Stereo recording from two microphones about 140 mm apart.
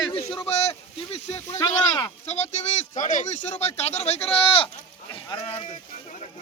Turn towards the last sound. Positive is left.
turn(degrees=45)  # may be behind; listen again after turning